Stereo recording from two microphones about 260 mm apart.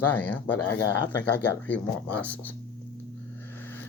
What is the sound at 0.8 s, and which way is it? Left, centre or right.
Speech, left.